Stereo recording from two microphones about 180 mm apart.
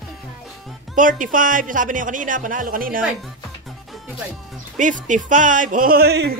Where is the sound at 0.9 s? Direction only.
45° right (ahead or behind).